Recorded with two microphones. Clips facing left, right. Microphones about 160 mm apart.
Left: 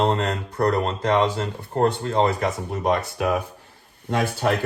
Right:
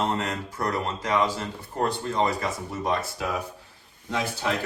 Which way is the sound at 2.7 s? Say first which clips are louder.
Left 4 dB; 60° left (ahead or behind).